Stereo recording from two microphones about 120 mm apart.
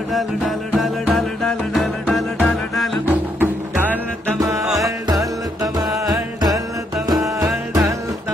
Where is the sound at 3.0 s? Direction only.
15° right (ahead or behind).